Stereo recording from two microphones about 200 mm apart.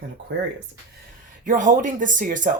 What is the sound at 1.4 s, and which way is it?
Speech, 40° right (ahead or behind).